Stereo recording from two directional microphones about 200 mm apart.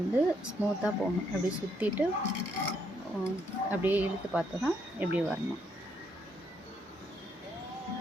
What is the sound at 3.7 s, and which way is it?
Speech, 10° right (ahead or behind).